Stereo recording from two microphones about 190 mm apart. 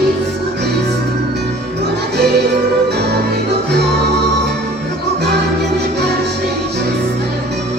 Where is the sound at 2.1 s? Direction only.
60° right (ahead or behind).